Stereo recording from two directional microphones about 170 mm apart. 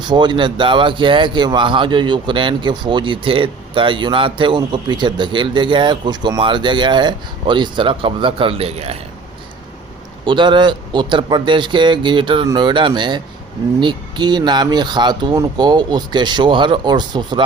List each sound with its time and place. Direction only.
0.0 s speech: 25° right (ahead or behind)
10.2 s speech: 30° right (ahead or behind)